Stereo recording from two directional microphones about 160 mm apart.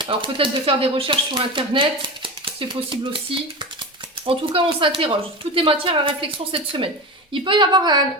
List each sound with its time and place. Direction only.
0.0 s speech: 30° right (ahead or behind)
4.3 s a woman's voice: 35° right (ahead or behind)